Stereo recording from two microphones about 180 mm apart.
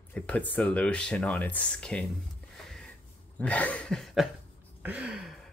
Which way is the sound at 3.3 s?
10° left (ahead or behind).